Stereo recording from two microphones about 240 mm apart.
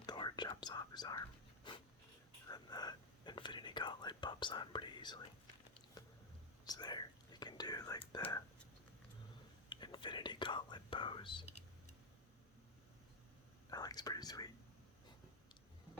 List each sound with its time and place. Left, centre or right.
0.0 s whispering: centre
6.7 s whispering: centre
9.6 s whispering: centre
13.7 s whispering: centre